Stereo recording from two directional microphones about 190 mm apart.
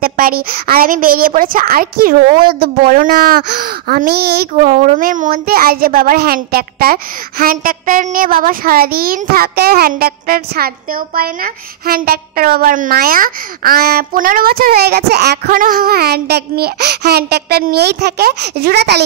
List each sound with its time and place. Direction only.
0.0 s a woman's voice: 50° right (ahead or behind)